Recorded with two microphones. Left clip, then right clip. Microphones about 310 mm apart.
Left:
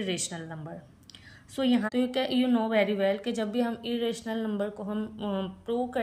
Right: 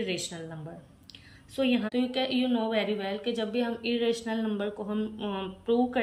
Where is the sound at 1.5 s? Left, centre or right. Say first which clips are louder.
Even; centre.